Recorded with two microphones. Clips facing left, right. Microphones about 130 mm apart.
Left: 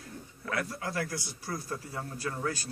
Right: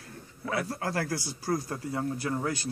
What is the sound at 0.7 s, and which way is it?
Speech, 50° right (ahead or behind).